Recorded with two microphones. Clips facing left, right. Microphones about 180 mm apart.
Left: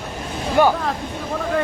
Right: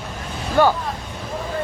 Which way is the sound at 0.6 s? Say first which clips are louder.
Even; 15° left (ahead or behind).